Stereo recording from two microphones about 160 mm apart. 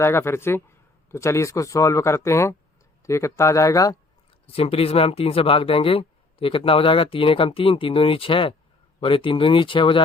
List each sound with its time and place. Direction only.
0.0 s speech: 15° left (ahead or behind)
4.4 s speech: 35° left (ahead or behind)